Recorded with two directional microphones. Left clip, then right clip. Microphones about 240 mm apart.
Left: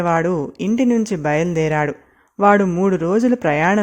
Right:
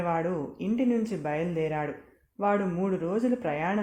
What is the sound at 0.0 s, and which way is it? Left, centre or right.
Speech, left.